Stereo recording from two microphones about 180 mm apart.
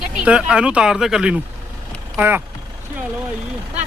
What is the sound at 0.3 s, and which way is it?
Speech, 5° right (ahead or behind).